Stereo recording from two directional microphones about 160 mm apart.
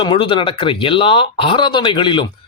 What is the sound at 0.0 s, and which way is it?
Speech, 30° left (ahead or behind).